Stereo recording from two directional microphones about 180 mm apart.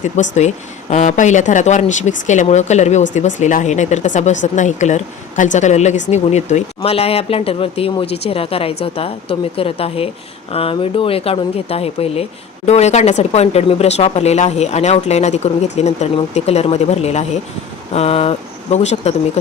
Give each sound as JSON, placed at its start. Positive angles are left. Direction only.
{"t": 0.0, "sound": "speech", "side_deg": 40}